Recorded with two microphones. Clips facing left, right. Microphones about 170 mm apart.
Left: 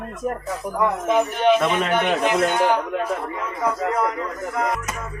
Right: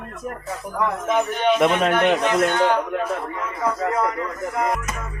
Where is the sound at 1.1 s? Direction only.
5° left (ahead or behind).